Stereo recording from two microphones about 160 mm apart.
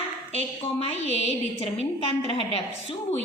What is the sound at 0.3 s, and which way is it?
A woman's voice, 40° left (ahead or behind).